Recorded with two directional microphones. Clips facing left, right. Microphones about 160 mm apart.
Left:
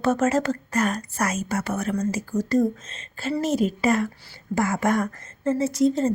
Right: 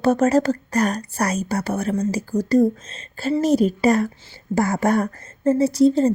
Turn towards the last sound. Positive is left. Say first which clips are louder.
# right 5 dB
turn(degrees=-35)  # may be behind; listen again after turning